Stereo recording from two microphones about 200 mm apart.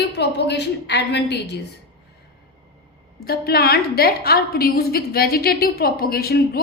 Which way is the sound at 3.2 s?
50° left (ahead or behind).